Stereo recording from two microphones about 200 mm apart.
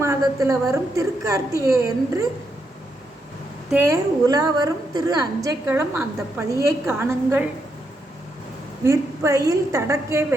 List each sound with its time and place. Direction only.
0.0 s a sound: 15° right (ahead or behind)
0.7 s a woman's voice: 15° right (ahead or behind)
3.7 s a woman's voice: 10° right (ahead or behind)
8.8 s a woman's voice: 15° right (ahead or behind)